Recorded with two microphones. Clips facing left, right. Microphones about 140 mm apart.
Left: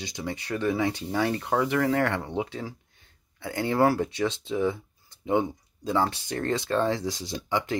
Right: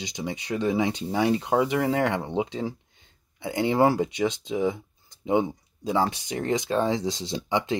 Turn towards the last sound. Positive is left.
turn(degrees=-20)  # may be behind; listen again after turning